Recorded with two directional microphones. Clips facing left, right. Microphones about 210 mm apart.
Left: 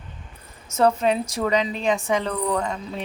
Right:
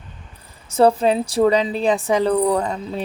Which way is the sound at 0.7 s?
30° right (ahead or behind).